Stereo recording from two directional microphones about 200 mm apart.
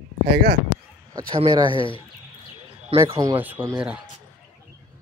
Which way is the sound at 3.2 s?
10° right (ahead or behind).